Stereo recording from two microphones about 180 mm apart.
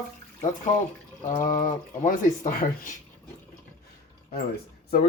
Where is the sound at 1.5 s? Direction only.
50° left (ahead or behind).